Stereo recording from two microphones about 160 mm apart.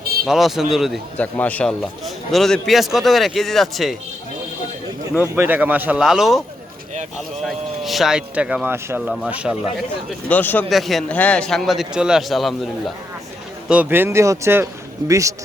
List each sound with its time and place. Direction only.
0.3 s a man's voice: centre (ahead or behind)
1.1 s a man's voice: 10° left (ahead or behind)
5.3 s speech: 10° right (ahead or behind)
7.4 s a man's voice: centre (ahead or behind)
10.2 s speech: 10° left (ahead or behind)
10.7 s a man's voice: centre (ahead or behind); by 15.4 s 20° right (ahead or behind)